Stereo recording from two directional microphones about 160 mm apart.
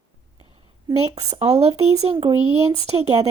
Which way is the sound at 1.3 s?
40° right (ahead or behind).